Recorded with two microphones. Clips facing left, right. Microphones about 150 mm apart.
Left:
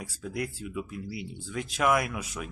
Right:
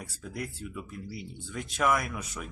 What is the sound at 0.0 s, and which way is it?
Speech, 5° left (ahead or behind).